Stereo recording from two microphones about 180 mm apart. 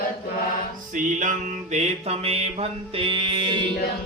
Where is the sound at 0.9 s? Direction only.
45° right (ahead or behind); by 3.6 s 25° right (ahead or behind).